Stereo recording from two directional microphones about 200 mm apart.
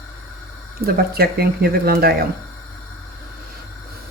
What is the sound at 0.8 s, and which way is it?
Speech, 50° right (ahead or behind).